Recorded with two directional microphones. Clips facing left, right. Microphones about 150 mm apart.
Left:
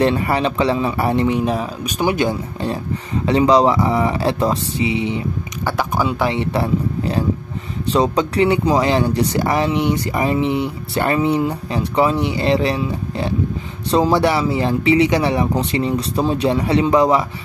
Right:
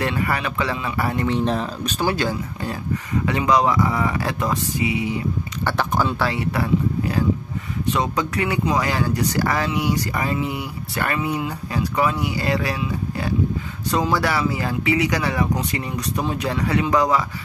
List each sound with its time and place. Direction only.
0.0 s speech: 30° left (ahead or behind)
1.3 s speech: 10° left (ahead or behind); by 5.2 s 25° left (ahead or behind)
5.7 s speech: 10° left (ahead or behind)